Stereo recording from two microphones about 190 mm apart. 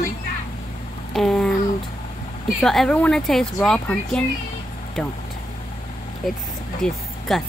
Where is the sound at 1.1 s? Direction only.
5° left (ahead or behind).